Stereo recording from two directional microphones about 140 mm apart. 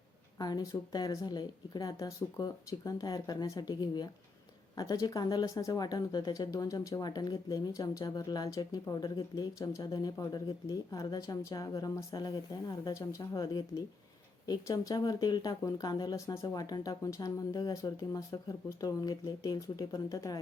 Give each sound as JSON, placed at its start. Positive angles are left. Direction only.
{"t": 0.3, "sound": "speech", "side_deg": 30}